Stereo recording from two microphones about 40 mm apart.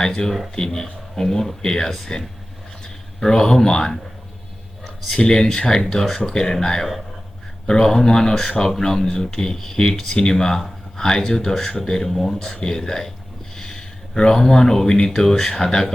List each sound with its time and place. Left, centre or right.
0.0 s speech: centre
3.2 s speech: centre
5.1 s speech: centre
12.6 s speech: centre